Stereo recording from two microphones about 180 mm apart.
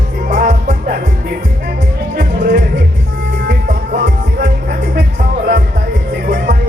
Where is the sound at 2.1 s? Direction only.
60° right (ahead or behind).